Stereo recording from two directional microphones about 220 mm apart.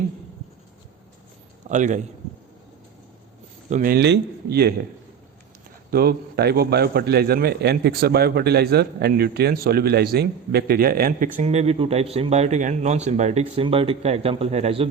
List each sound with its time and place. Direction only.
1.6 s a man's voice: 35° right (ahead or behind)
3.7 s a man's voice: 40° right (ahead or behind)
5.9 s a man's voice: 45° right (ahead or behind)
11.3 s speech: 30° right (ahead or behind)